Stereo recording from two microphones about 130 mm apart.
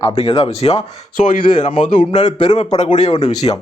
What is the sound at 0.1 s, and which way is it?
Speech, 50° left (ahead or behind).